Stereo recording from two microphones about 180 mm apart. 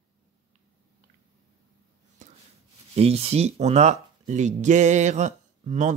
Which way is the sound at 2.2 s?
45° right (ahead or behind).